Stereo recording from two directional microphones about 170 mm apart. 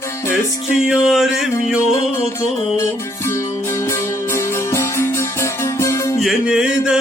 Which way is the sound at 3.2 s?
15° left (ahead or behind).